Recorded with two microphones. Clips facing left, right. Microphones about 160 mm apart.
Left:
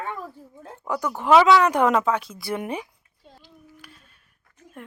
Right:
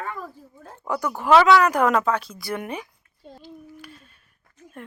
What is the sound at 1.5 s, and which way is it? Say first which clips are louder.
Speech: even; 25° left (ahead or behind).